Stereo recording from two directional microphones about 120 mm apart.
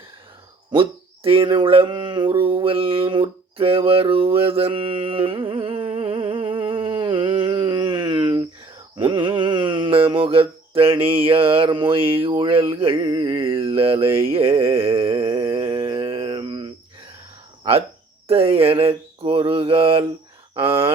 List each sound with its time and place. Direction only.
0.7 s a sound: 45° right (ahead or behind)
9.0 s mantra: 40° right (ahead or behind)
18.3 s mantra: 55° right (ahead or behind)